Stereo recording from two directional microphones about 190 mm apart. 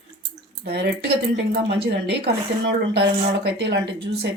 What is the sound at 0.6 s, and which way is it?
Speech, 60° right (ahead or behind).